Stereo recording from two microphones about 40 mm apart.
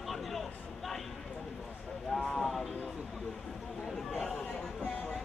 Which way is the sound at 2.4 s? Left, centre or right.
Centre.